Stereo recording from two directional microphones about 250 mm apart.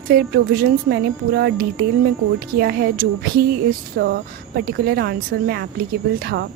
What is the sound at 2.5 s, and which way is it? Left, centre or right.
A woman's voice, right.